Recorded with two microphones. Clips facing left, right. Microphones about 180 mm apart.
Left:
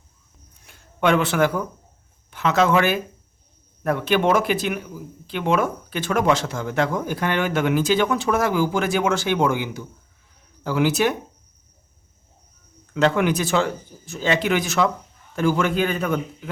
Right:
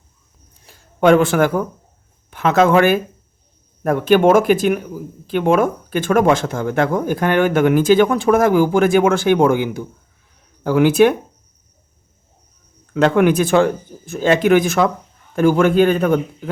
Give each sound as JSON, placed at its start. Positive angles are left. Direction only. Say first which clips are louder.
{"t": 0.6, "sound": "a sound", "louder": "right 7 dB", "side_deg": -35}
{"t": 2.3, "sound": "speech", "louder": "right 5 dB", "side_deg": -55}
{"t": 12.9, "sound": "speech", "louder": "right 6 dB", "side_deg": -55}